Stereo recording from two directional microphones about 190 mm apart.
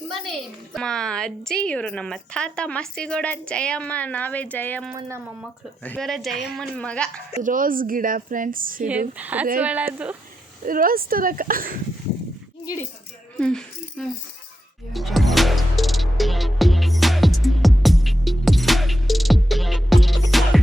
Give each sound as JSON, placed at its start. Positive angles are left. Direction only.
{"t": 0.1, "sound": "a woman's voice", "side_deg": 0}
{"t": 4.9, "sound": "a woman's voice", "side_deg": -15}
{"t": 5.8, "sound": "a woman's voice", "side_deg": 5}
{"t": 7.4, "sound": "a woman's voice", "side_deg": -45}
{"t": 8.9, "sound": "a woman's voice", "side_deg": -5}
{"t": 10.7, "sound": "a woman's voice", "side_deg": -50}
{"t": 12.6, "sound": "speech", "side_deg": 15}
{"t": 13.4, "sound": "speech", "side_deg": 5}
{"t": 14.9, "sound": "music", "side_deg": 0}